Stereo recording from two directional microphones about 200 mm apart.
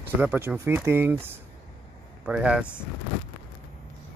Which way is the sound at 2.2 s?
5° right (ahead or behind).